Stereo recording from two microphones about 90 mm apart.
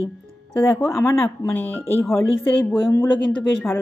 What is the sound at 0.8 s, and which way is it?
A woman's voice, 30° left (ahead or behind).